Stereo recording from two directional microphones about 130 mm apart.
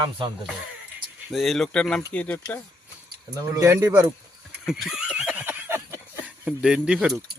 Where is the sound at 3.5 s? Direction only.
20° right (ahead or behind).